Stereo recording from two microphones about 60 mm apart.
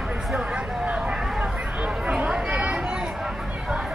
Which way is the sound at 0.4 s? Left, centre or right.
Centre.